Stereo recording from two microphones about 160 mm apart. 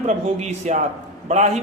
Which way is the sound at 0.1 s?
45° right (ahead or behind).